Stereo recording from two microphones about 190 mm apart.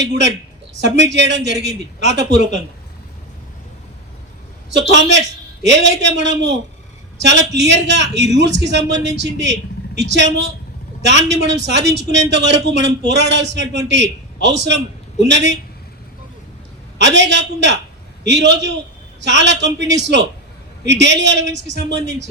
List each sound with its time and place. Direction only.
0.0 s speech: 70° right (ahead or behind)
4.7 s speech: 70° right (ahead or behind)
17.0 s speech: 70° right (ahead or behind)